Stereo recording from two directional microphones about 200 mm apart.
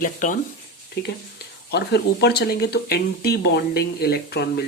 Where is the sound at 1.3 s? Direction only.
55° left (ahead or behind).